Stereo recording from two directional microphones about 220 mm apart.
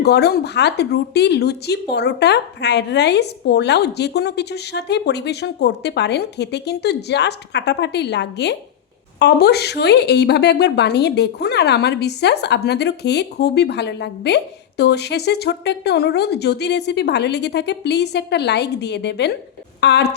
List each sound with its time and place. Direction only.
0.0 s a woman's voice: 50° left (ahead or behind)